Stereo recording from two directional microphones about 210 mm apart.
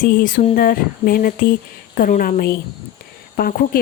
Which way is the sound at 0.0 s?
40° left (ahead or behind).